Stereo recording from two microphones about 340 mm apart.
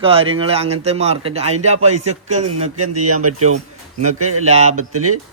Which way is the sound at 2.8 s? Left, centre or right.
Right.